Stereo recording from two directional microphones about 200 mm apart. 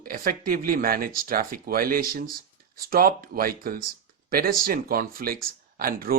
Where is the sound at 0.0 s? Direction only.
45° right (ahead or behind).